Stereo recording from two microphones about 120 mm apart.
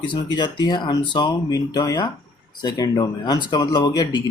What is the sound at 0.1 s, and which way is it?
Speech, 40° left (ahead or behind).